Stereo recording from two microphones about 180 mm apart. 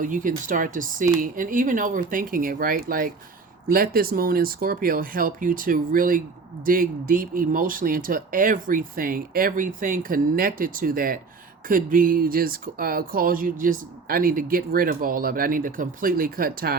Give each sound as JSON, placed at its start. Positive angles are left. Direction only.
{"t": 0.0, "sound": "speech", "side_deg": -45}